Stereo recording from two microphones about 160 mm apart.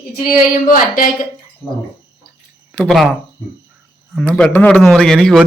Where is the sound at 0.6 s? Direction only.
60° left (ahead or behind).